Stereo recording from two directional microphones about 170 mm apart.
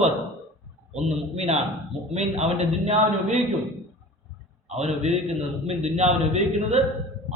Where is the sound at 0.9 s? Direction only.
40° right (ahead or behind).